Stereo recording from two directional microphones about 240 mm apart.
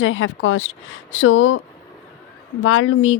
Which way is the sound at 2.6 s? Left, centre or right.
Left.